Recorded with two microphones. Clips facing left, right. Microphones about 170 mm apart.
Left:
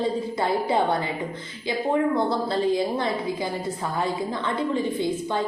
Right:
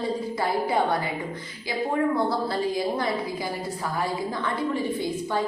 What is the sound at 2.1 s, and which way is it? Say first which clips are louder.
A woman's voice: left 1 dB; 25° left (ahead or behind).